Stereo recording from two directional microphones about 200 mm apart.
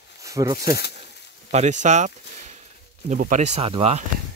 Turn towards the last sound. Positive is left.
turn(degrees=-30)  # may be behind; listen again after turning